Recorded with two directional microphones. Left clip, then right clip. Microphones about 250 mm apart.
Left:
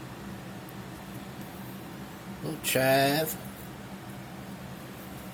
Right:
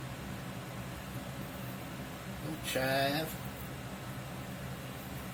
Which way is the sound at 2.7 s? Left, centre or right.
Left.